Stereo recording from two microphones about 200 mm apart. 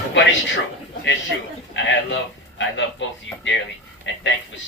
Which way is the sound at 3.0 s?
65° left (ahead or behind).